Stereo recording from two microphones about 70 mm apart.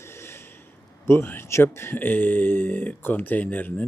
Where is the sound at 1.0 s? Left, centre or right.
Left.